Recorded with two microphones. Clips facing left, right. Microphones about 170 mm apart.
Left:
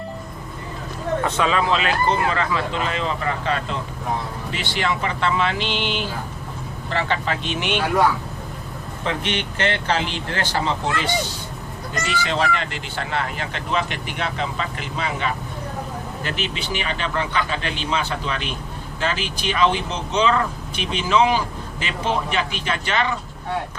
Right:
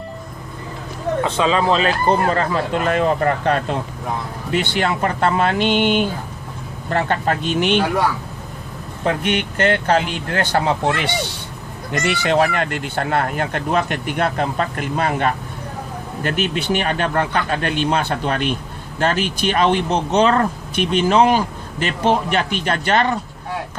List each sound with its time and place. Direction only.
1.2 s speech: 30° right (ahead or behind); by 7.8 s 45° right (ahead or behind)
9.0 s speech: 50° right (ahead or behind)